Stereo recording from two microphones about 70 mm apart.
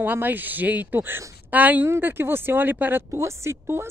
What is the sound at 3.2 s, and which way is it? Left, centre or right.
Speech, right.